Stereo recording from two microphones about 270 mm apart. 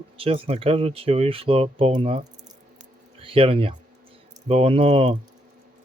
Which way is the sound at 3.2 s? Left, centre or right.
Centre.